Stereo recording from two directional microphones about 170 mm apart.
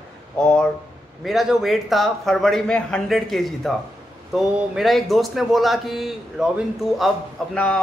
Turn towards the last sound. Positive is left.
turn(degrees=5)  # may be behind; listen again after turning